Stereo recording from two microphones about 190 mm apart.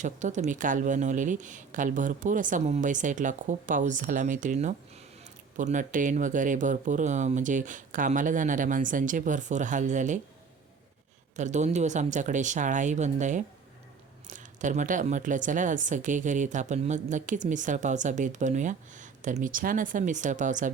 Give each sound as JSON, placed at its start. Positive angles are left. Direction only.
{"t": 0.0, "sound": "speech", "side_deg": -40}
{"t": 11.3, "sound": "speech", "side_deg": -40}